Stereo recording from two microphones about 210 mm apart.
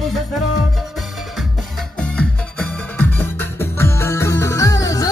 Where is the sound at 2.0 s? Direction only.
5° left (ahead or behind).